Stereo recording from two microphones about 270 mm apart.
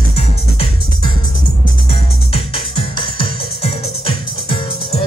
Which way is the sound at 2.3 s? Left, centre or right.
Centre.